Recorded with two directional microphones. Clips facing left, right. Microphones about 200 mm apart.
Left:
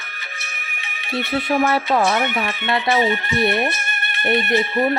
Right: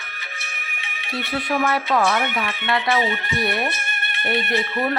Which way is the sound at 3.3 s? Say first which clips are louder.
Left 5 dB; 25° left (ahead or behind).